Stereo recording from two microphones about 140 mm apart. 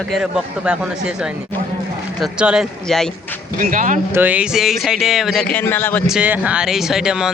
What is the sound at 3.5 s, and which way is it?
Speech, 75° right (ahead or behind).